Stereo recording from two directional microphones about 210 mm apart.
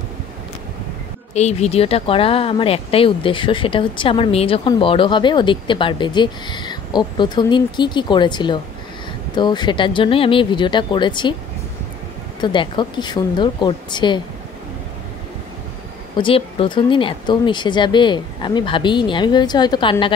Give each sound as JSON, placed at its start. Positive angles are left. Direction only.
{"t": 1.3, "sound": "speech", "side_deg": 30}
{"t": 12.4, "sound": "speech", "side_deg": 20}
{"t": 16.2, "sound": "speech", "side_deg": 25}